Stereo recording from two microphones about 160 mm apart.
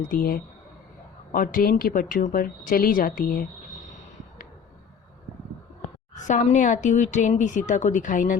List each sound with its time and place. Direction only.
0.0 s speech: 65° left (ahead or behind)
6.1 s speech: 50° left (ahead or behind)